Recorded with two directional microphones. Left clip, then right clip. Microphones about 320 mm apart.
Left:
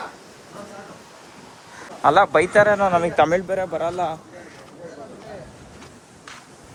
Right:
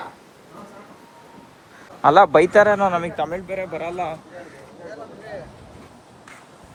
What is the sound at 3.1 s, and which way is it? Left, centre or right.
Speech, left.